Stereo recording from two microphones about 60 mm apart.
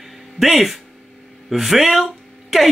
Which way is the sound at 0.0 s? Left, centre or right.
Centre.